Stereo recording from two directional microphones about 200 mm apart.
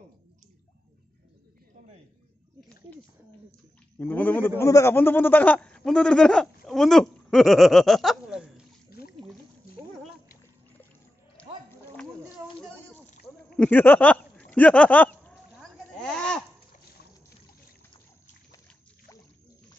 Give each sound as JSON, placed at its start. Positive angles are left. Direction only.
{"t": 4.0, "sound": "a man's voice", "side_deg": 10}
{"t": 9.0, "sound": "boat", "side_deg": 50}
{"t": 11.3, "sound": "music", "side_deg": 5}
{"t": 13.6, "sound": "speech", "side_deg": 10}
{"t": 16.0, "sound": "a sound", "side_deg": 5}